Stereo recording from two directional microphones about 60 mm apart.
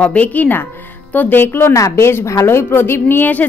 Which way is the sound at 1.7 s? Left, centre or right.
Left.